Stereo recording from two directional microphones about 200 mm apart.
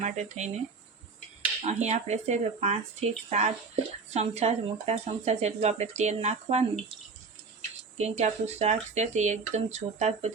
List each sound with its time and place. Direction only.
0.0 s speech: 35° right (ahead or behind)
1.6 s speech: 35° right (ahead or behind)
7.9 s speech: 35° right (ahead or behind)